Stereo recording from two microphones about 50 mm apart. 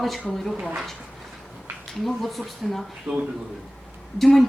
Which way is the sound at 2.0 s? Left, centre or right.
Centre.